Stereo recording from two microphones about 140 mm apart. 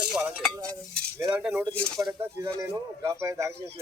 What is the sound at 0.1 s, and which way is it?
Stir, 5° right (ahead or behind).